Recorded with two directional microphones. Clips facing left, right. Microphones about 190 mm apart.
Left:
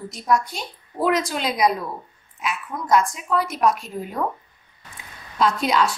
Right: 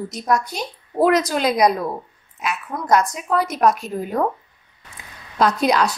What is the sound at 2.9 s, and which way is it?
Speech, 40° right (ahead or behind).